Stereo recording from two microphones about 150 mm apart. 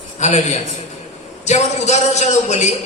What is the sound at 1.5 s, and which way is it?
A woman's voice, 50° left (ahead or behind).